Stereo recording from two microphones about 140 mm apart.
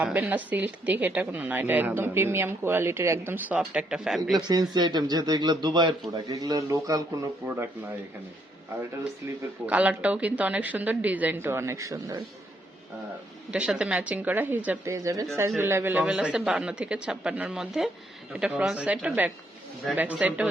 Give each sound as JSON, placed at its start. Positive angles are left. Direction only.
{"t": 0.0, "sound": "a woman's voice", "side_deg": -10}
{"t": 4.4, "sound": "a man's voice", "side_deg": -30}
{"t": 9.4, "sound": "a woman's voice", "side_deg": -10}
{"t": 13.5, "sound": "a woman's voice", "side_deg": -5}
{"t": 14.9, "sound": "a woman's voice", "side_deg": -25}